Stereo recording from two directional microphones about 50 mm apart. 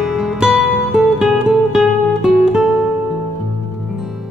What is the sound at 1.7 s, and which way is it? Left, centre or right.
Guitar, centre.